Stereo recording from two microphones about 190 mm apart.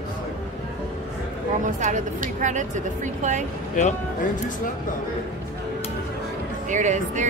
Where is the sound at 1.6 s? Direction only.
45° right (ahead or behind).